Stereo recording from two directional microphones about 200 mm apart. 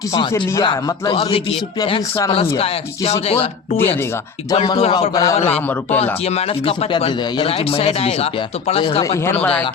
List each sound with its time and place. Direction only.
0.1 s speech: 20° left (ahead or behind)
4.5 s speech: 25° left (ahead or behind)
6.0 s speech: 30° left (ahead or behind)
9.4 s speech: 5° left (ahead or behind)